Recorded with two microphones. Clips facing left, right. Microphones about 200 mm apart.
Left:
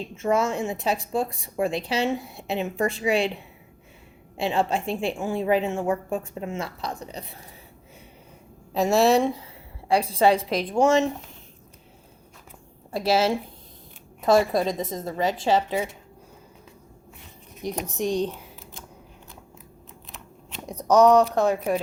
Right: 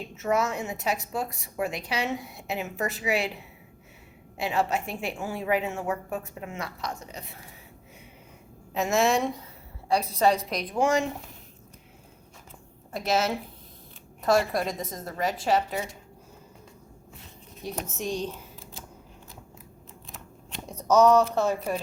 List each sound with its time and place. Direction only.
0.2 s a woman's voice: 30° left (ahead or behind)
4.4 s a woman's voice: 30° left (ahead or behind)
8.7 s a woman's voice: 35° left (ahead or behind)
12.9 s a woman's voice: 30° left (ahead or behind)
17.6 s a woman's voice: 15° left (ahead or behind)
20.8 s a woman's voice: 15° left (ahead or behind)